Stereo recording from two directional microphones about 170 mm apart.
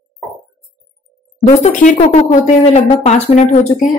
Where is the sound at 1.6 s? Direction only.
45° left (ahead or behind).